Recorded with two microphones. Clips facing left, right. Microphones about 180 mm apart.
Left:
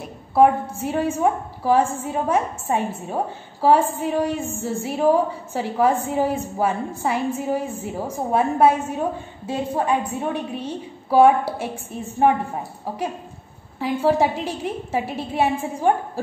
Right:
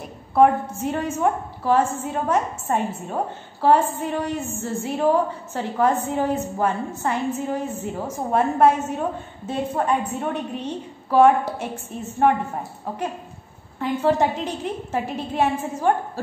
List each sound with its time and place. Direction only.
0.3 s a woman's voice: 10° left (ahead or behind)